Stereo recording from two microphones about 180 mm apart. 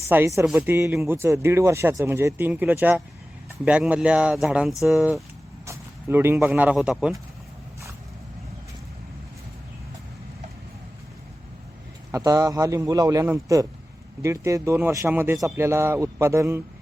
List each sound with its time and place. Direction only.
0.1 s speech: 15° right (ahead or behind)
5.6 s speech: 15° right (ahead or behind)
12.1 s speech: 15° right (ahead or behind)